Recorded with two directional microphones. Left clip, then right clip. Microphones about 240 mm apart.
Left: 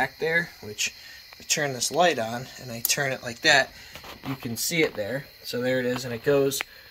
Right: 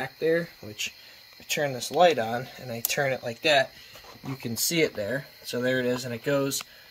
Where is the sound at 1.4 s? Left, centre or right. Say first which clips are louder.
Left 2 dB; centre.